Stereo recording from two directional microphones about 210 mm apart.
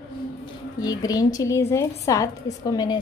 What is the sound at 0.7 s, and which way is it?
A woman's voice, 15° left (ahead or behind).